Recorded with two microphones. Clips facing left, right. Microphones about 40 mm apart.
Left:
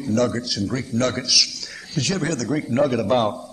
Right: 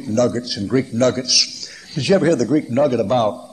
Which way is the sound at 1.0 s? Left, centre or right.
Centre.